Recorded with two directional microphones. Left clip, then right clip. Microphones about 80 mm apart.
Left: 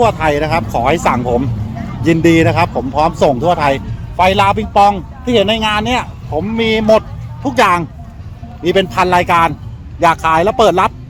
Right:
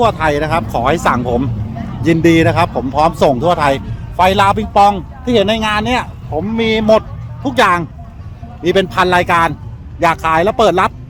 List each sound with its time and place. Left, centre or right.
0.0 s speech: right
2.9 s a man's voice: right; by 7.9 s centre
8.6 s a man's voice: right
10.0 s speech: centre